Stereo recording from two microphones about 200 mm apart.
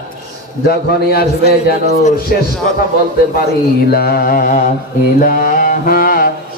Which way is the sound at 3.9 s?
50° left (ahead or behind).